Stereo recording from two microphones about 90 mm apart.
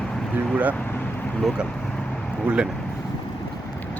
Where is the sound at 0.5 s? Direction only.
15° right (ahead or behind).